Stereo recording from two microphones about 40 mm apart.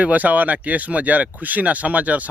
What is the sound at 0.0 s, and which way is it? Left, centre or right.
Speech, right.